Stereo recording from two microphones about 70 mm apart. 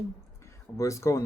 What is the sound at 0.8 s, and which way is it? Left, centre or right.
Speech, left.